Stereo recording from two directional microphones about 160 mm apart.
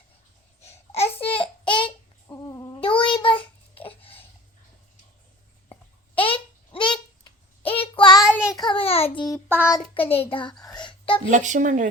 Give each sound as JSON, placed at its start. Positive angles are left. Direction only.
{"t": 0.6, "sound": "babbling", "side_deg": 40}
{"t": 2.2, "sound": "child singing", "side_deg": 20}
{"t": 6.1, "sound": "a sound", "side_deg": 35}
{"t": 7.6, "sound": "child singing", "side_deg": 35}
{"t": 8.4, "sound": "babbling", "side_deg": -5}
{"t": 8.6, "sound": "a sound", "side_deg": 35}
{"t": 9.1, "sound": "child singing", "side_deg": 25}
{"t": 9.5, "sound": "child singing", "side_deg": -10}
{"t": 9.9, "sound": "a child's voice", "side_deg": 35}
{"t": 10.8, "sound": "a sound", "side_deg": 30}
{"t": 11.3, "sound": "a woman's voice", "side_deg": -50}